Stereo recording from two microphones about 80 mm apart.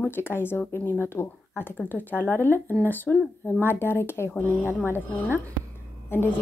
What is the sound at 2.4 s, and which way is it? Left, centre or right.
Speech, right.